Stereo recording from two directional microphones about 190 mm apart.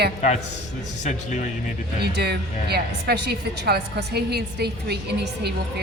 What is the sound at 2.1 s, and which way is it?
A woman's voice, 60° right (ahead or behind).